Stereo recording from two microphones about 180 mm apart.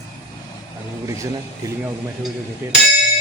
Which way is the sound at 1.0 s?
15° right (ahead or behind).